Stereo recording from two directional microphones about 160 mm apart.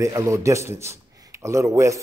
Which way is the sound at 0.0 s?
20° right (ahead or behind).